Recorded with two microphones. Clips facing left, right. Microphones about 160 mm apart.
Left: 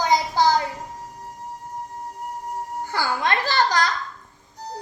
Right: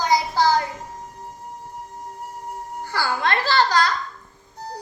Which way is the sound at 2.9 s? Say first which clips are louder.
Right 1 dB; 15° left (ahead or behind).